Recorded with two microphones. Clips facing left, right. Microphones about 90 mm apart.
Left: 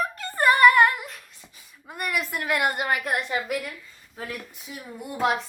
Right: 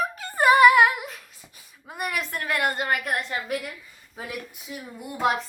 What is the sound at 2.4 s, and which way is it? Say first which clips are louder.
Speech: even; 20° left (ahead or behind).